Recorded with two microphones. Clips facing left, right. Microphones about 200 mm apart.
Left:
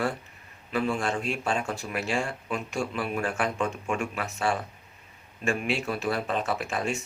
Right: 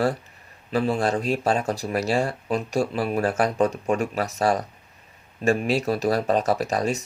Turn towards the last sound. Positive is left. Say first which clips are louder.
# right 6 dB
turn(degrees=-40)  # may be behind; listen again after turning